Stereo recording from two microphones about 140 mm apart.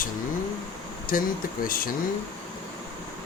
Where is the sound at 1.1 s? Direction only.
80° left.